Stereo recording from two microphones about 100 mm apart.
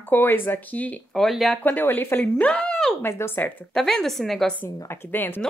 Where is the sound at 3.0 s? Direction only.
25° left (ahead or behind).